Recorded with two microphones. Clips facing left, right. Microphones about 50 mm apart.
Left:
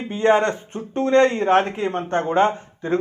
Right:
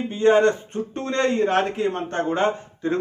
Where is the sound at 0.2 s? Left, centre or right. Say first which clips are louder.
Right 1 dB; left.